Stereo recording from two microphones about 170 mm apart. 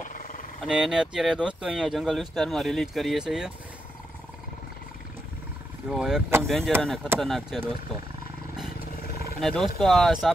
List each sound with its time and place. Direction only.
0.0 s dog: 50° left (ahead or behind)
0.6 s speech: 5° right (ahead or behind)
5.9 s speech: 5° right (ahead or behind)
8.9 s roar: 60° left (ahead or behind)
9.4 s speech: centre (ahead or behind)